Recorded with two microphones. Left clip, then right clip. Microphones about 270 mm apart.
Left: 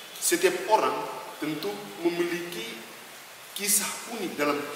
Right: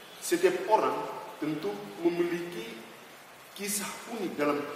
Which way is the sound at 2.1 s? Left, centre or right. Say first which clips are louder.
Left 2 dB; centre.